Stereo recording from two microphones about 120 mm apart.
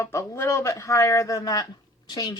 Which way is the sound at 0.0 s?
25° left (ahead or behind).